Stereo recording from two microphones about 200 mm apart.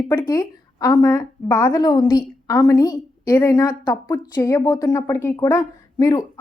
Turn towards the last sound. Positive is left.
turn(degrees=20)  # may be behind; listen again after turning